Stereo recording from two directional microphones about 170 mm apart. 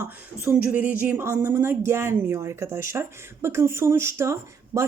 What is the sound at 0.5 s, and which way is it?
Speech, 10° right (ahead or behind).